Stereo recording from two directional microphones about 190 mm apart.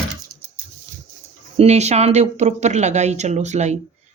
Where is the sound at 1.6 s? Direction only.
35° right (ahead or behind).